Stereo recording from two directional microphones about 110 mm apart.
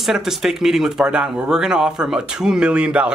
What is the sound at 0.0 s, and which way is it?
Speech, 5° right (ahead or behind).